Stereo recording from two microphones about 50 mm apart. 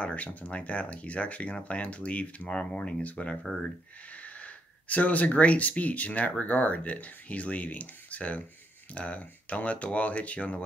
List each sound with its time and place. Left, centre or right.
0.0 s speech: left